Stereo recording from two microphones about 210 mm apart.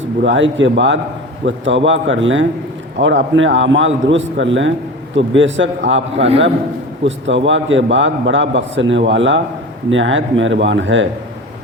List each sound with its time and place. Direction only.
0.2 s a man's voice: 60° right (ahead or behind)
7.0 s a man's voice: 60° right (ahead or behind)